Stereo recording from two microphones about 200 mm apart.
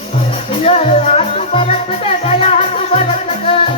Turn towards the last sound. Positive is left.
turn(degrees=30)  # may be behind; listen again after turning